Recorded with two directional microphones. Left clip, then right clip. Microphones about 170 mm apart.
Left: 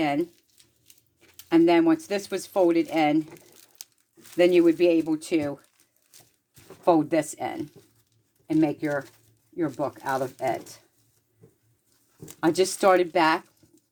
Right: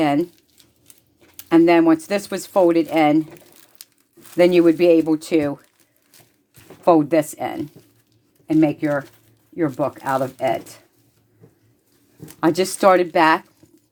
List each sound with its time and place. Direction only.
0.0 s speech: 35° right (ahead or behind)
1.4 s speech: 30° right (ahead or behind); by 3.7 s 15° right (ahead or behind)
4.4 s speech: 35° right (ahead or behind)
6.8 s speech: 20° right (ahead or behind)
12.4 s speech: 25° right (ahead or behind)